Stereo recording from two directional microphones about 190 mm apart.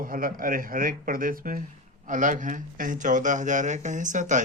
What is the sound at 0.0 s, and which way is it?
Speech, 45° right (ahead or behind).